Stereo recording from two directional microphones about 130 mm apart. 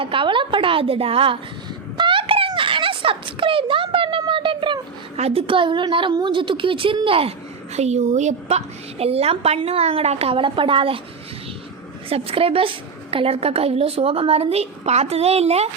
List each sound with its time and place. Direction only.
0.0 s a woman's voice: 40° right (ahead or behind)
2.0 s a sound: 40° right (ahead or behind)
5.1 s a woman's voice: 50° right (ahead or behind)
12.0 s a woman's voice: 45° right (ahead or behind)